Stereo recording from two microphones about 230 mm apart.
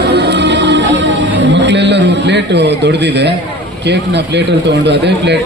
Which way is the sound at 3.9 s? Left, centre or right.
Right.